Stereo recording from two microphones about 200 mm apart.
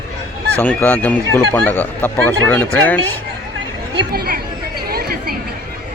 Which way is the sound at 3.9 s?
50° right (ahead or behind).